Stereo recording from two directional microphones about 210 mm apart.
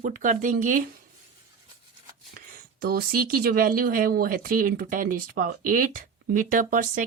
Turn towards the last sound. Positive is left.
turn(degrees=-40)  # may be behind; listen again after turning